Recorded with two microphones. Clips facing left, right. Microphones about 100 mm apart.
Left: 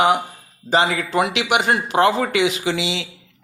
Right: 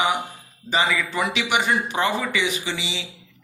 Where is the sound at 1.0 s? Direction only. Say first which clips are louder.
Left 5 dB; 75° left (ahead or behind).